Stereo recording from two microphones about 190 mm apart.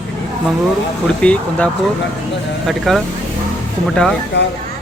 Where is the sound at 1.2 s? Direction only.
5° left (ahead or behind).